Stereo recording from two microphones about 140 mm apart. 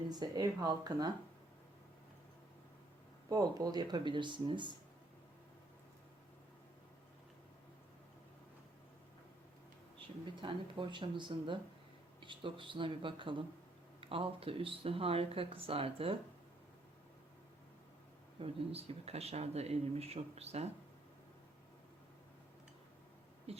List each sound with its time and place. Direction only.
0.1 s speech: 30° right (ahead or behind)
3.2 s speech: 25° right (ahead or behind)
10.4 s speech: 35° right (ahead or behind)
18.3 s speech: 45° right (ahead or behind)
23.5 s speech: 45° right (ahead or behind)